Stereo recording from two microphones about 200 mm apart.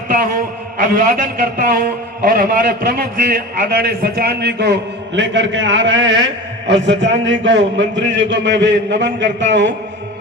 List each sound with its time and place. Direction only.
0.1 s a man's voice: 45° right (ahead or behind); by 9.7 s 65° right (ahead or behind)